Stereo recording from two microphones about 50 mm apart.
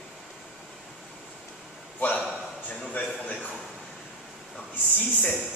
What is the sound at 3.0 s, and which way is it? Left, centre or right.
Speech, left.